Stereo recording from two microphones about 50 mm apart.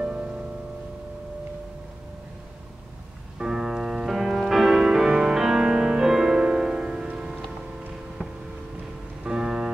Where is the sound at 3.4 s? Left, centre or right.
Centre.